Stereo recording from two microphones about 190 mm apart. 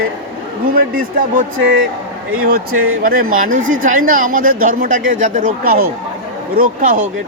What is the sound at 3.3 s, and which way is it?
Speech, 45° right (ahead or behind).